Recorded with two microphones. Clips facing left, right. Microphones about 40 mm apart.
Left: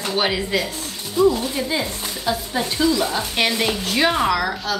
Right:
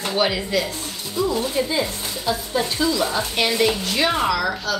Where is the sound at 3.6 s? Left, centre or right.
Centre.